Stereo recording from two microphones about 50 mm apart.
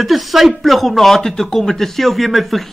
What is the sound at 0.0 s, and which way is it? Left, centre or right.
A man's voice, centre.